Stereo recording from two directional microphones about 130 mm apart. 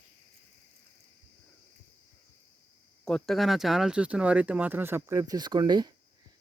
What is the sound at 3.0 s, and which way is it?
Speech, 5° left (ahead or behind).